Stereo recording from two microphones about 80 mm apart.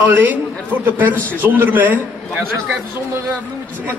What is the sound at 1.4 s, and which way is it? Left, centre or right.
A man's voice, right.